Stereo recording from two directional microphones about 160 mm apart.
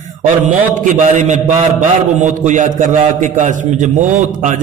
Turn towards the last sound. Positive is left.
turn(degrees=-50)  # may be behind; listen again after turning